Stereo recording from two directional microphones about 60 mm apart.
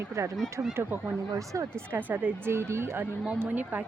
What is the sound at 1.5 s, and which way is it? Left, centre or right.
Speech, right.